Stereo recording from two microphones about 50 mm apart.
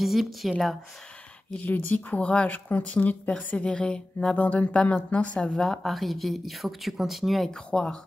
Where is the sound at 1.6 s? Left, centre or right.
Left; by 4.0 s centre.